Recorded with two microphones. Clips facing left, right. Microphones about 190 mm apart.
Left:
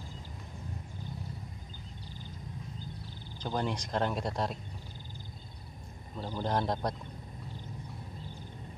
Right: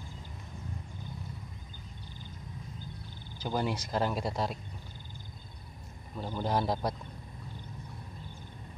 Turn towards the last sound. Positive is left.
turn(degrees=-5)  # may be behind; listen again after turning